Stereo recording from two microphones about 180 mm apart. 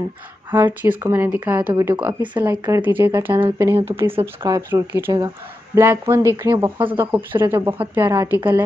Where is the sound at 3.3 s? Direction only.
25° right (ahead or behind).